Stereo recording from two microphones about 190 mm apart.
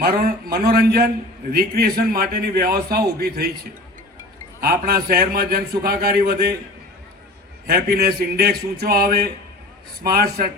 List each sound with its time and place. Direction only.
0.0 s a man's voice: 55° right (ahead or behind)
4.6 s a man's voice: 55° right (ahead or behind)
7.7 s a man's voice: 55° right (ahead or behind)